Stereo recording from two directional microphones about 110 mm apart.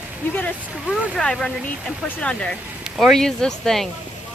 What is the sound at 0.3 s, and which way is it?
Speech, 15° left (ahead or behind).